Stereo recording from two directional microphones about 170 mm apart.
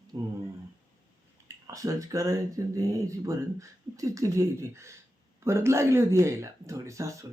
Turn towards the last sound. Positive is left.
turn(degrees=-20)  # may be behind; listen again after turning